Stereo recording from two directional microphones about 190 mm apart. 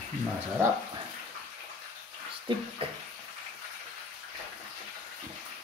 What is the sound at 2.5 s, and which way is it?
Speech, 25° right (ahead or behind).